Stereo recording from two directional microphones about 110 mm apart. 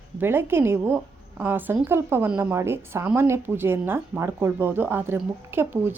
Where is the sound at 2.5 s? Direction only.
25° right (ahead or behind).